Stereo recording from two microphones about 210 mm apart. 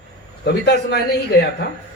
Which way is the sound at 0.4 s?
55° left (ahead or behind).